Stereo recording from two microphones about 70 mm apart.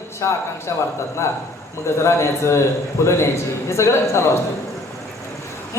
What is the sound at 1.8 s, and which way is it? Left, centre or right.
A man's voice, left.